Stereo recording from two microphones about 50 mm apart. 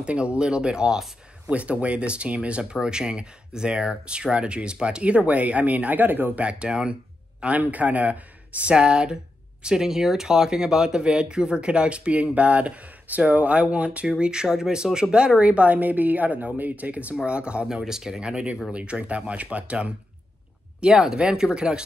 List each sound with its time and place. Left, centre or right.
0.0 s speech: right
6.4 s speech: centre
7.4 s speech: right
20.8 s speech: centre